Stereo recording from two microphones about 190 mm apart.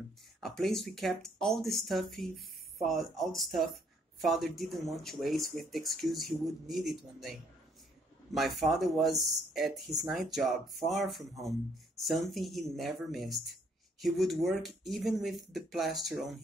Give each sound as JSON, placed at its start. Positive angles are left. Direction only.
{"t": 0.4, "sound": "speech", "side_deg": 0}
{"t": 8.4, "sound": "speech", "side_deg": 0}